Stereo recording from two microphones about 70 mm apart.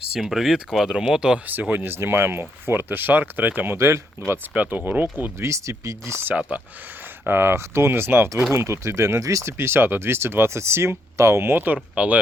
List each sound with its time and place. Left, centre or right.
0.1 s speech: centre
1.5 s speech: right
3.8 s speech: right
4.5 s speech: right
5.4 s speech: right
7.3 s speech: right